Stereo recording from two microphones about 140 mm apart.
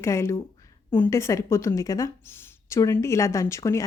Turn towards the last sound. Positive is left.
turn(degrees=20)  # may be behind; listen again after turning